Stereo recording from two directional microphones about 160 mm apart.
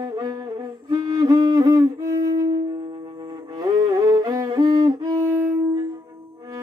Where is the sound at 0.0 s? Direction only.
25° right (ahead or behind).